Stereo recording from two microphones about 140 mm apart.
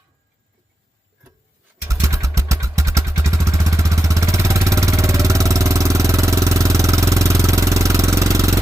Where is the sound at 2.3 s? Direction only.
20° right (ahead or behind).